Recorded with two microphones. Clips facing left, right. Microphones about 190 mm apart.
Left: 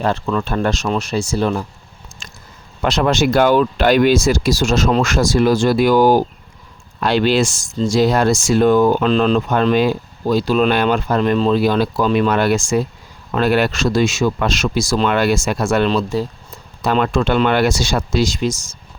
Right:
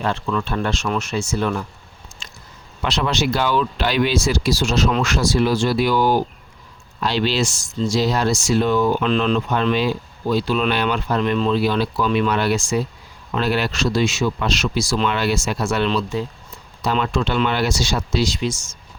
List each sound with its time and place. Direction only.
0.0 s speech: 40° left (ahead or behind)
2.8 s speech: 45° left (ahead or behind)
16.8 s speech: 50° left (ahead or behind)